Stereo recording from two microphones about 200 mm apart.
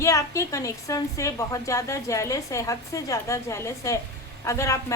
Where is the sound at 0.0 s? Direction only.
15° left (ahead or behind).